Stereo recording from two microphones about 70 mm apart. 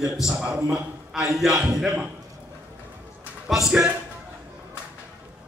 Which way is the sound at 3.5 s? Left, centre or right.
Centre.